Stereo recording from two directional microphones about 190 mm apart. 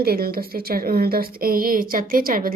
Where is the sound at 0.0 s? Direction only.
55° right (ahead or behind).